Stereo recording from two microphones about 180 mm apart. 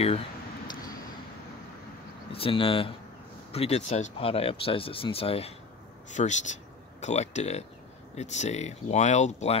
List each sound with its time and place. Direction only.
2.3 s speech: 30° left (ahead or behind)